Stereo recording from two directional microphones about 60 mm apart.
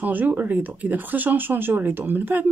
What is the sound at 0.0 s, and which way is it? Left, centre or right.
Speech, right.